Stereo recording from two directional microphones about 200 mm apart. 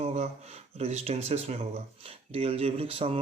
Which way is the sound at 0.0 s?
35° right (ahead or behind).